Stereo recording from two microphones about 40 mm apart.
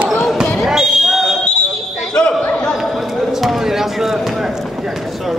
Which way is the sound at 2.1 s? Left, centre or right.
Left.